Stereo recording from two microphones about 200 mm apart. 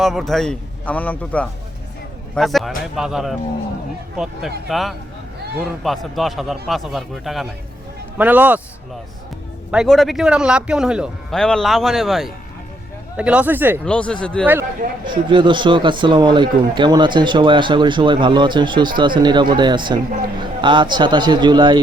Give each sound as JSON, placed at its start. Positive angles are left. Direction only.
{"t": 0.0, "sound": "a man's voice", "side_deg": 0}
{"t": 9.7, "sound": "speech", "side_deg": 0}
{"t": 13.8, "sound": "speech", "side_deg": 5}
{"t": 15.0, "sound": "speech", "side_deg": -25}